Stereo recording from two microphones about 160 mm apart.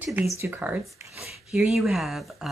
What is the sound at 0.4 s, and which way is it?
Speech, 10° right (ahead or behind).